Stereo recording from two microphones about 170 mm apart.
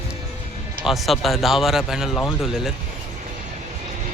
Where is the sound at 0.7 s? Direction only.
Centre (ahead or behind).